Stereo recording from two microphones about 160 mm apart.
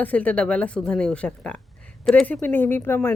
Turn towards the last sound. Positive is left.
turn(degrees=15)  # may be behind; listen again after turning